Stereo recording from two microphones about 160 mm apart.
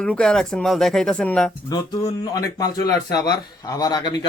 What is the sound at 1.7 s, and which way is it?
Speech, 25° left (ahead or behind).